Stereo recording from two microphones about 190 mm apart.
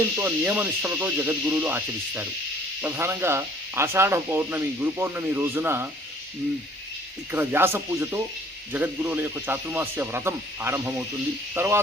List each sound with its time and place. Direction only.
0.2 s speech: 10° right (ahead or behind)
7.3 s speech: 10° right (ahead or behind)